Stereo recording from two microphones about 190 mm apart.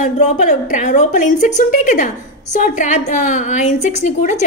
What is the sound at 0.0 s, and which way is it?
A woman's voice, 40° left (ahead or behind).